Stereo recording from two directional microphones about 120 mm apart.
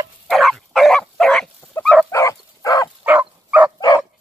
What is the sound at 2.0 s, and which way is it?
Dog, 25° left (ahead or behind).